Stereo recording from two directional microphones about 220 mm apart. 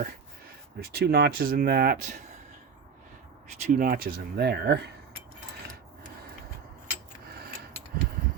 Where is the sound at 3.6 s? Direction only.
35° right (ahead or behind).